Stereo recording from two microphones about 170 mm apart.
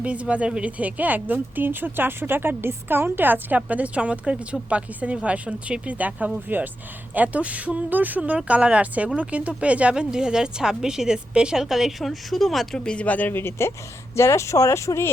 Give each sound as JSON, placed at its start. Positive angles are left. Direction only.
{"t": 0.0, "sound": "a woman's voice", "side_deg": -5}